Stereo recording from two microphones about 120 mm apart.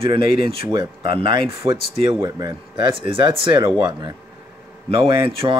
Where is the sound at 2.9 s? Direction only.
45° right (ahead or behind).